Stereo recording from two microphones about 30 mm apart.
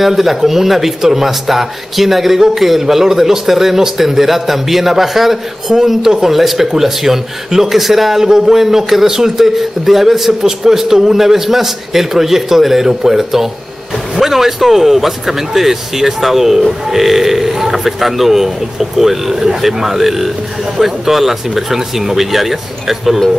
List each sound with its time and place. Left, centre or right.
0.0 s speech: centre
6.3 s speech: centre